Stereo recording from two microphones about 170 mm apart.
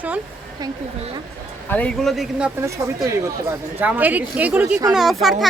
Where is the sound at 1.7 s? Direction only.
5° left (ahead or behind).